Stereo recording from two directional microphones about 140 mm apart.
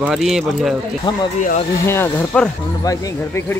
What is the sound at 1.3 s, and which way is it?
Speech, 60° left (ahead or behind).